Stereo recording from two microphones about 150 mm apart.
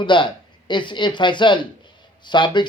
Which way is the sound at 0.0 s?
30° left (ahead or behind).